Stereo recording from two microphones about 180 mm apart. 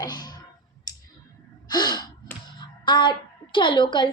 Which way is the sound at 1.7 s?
20° left (ahead or behind).